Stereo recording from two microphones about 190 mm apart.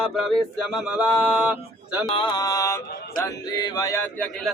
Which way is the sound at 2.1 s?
25° left (ahead or behind).